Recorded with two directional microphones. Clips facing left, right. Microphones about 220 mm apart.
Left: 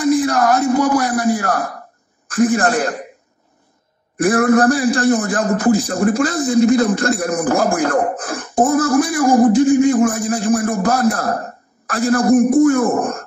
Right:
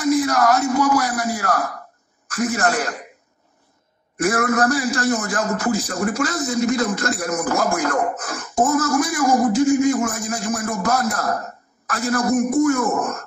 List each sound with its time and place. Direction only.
0.0 s a sound: 30° left (ahead or behind)
2.2 s a man's voice: 30° left (ahead or behind)
4.2 s a man's voice: 30° left (ahead or behind)